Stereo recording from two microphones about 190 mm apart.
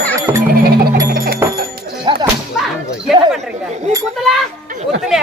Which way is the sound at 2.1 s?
25° right (ahead or behind).